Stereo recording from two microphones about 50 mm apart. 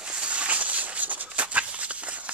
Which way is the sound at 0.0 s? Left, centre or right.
Right.